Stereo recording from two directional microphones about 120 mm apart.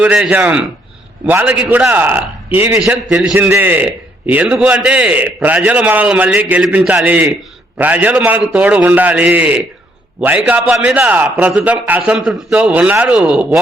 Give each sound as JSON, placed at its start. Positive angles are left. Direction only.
{"t": 0.0, "sound": "a man's voice", "side_deg": -10}